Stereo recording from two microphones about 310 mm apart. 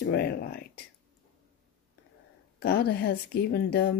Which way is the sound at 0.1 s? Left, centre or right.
Left.